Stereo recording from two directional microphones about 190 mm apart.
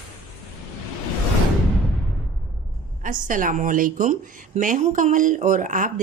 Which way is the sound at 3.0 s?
45° right (ahead or behind).